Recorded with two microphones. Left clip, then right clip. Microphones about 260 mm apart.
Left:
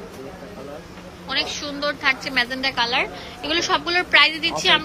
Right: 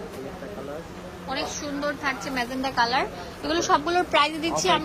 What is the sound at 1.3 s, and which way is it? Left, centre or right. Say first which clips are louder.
A woman's voice: left 5 dB; centre.